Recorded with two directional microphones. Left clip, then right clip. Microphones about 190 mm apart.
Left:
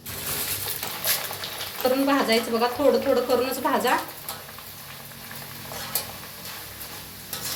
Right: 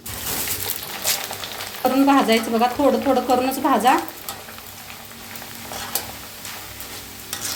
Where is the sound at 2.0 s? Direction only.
55° right (ahead or behind).